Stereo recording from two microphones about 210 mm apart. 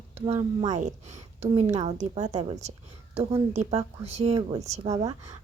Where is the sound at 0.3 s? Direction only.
20° right (ahead or behind).